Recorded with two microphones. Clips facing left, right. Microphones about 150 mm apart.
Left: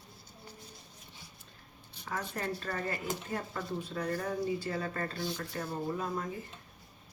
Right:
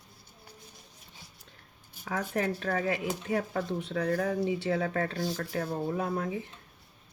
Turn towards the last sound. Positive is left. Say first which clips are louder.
# right 5 dB
turn(degrees=-70)  # may be behind; listen again after turning